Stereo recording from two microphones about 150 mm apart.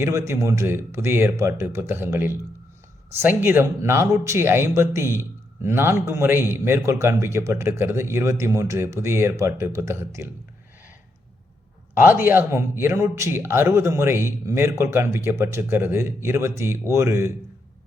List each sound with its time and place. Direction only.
0.0 s speech: 20° right (ahead or behind)
11.9 s speech: 15° right (ahead or behind)